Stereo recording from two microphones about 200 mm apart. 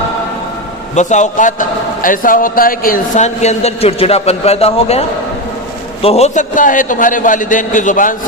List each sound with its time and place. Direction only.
0.9 s a man's voice: 35° left (ahead or behind)